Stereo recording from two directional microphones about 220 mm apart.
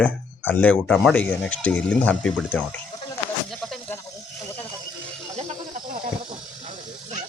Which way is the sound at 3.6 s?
Centre (ahead or behind).